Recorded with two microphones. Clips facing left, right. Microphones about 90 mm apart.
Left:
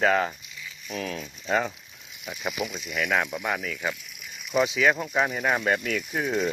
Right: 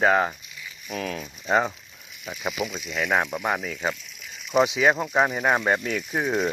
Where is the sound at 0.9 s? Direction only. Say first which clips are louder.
Right 2 dB; 40° right (ahead or behind).